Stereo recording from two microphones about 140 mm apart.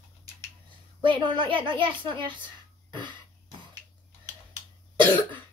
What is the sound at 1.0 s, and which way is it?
Speech, 35° right (ahead or behind).